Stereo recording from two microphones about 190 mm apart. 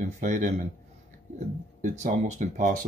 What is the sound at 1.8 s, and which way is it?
Speech, 40° right (ahead or behind).